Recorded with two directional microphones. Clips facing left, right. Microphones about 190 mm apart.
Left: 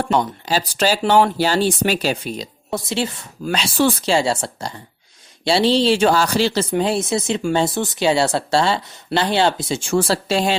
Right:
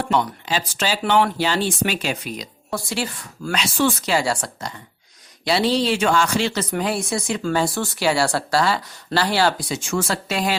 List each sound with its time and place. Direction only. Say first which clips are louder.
0.1 s speech: left 1 dB; 35° left (ahead or behind)